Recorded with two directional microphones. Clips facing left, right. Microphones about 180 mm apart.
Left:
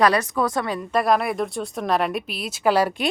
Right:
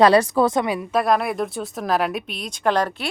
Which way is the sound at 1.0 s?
Centre (ahead or behind).